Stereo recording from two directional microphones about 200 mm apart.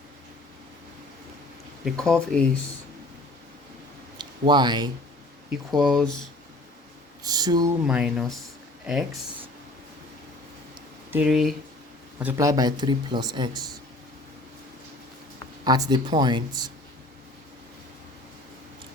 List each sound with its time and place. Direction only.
1.8 s speech: 5° left (ahead or behind)
4.2 s a man's voice: 20° right (ahead or behind)
5.7 s speech: centre (ahead or behind)
7.3 s speech: 20° right (ahead or behind)
7.9 s speech: 5° right (ahead or behind)
11.1 s speech: 5° right (ahead or behind)
12.2 s speech: 15° right (ahead or behind)
15.6 s speech: 20° right (ahead or behind)